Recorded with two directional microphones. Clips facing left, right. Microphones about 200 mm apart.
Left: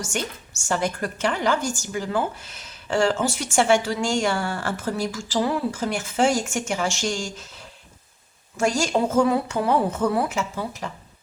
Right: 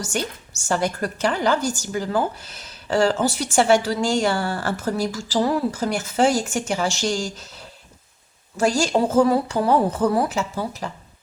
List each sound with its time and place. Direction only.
0.0 s a woman's voice: 35° right (ahead or behind)